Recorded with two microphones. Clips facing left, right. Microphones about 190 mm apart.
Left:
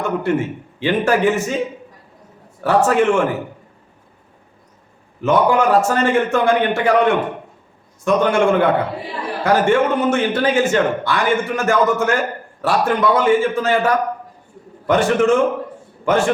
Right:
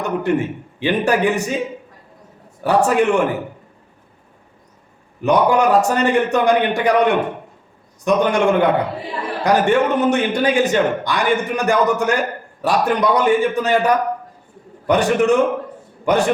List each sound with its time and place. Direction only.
0.0 s a man's voice: 15° right (ahead or behind)
2.6 s a man's voice: 15° right (ahead or behind)
5.2 s a man's voice: 15° right (ahead or behind)